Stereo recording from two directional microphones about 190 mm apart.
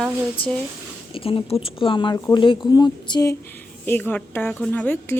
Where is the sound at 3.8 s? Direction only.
10° left (ahead or behind).